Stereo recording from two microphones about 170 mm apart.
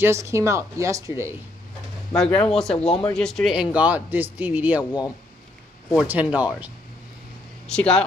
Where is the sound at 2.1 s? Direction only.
5° left (ahead or behind); by 4.8 s 10° right (ahead or behind).